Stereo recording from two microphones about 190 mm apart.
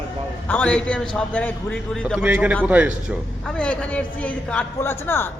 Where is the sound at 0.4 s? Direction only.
10° left (ahead or behind).